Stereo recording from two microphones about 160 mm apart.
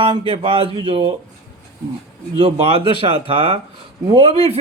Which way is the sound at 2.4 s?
35° right (ahead or behind).